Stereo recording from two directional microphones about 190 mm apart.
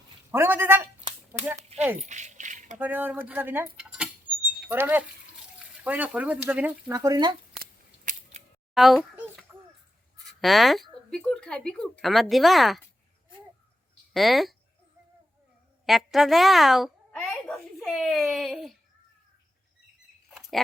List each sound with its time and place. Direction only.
0.3 s speech: 10° right (ahead or behind)
1.7 s speech: 30° right (ahead or behind)
2.0 s a sound: 40° right (ahead or behind)
2.7 s speech: 10° right (ahead or behind)
3.8 s cutlery: 5° right (ahead or behind)
4.7 s speech: 10° right (ahead or behind)
7.6 s scissors: 45° right (ahead or behind)
8.7 s a sound: centre (ahead or behind)
10.4 s speech: centre (ahead or behind)
14.1 s speech: centre (ahead or behind)
15.9 s a woman's voice: centre (ahead or behind)
20.3 s a sound: 5° right (ahead or behind)